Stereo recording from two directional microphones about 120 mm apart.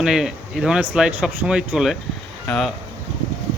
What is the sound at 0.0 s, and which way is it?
Speech, 5° right (ahead or behind).